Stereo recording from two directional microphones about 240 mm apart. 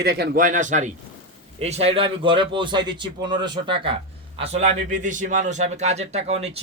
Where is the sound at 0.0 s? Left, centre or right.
Right.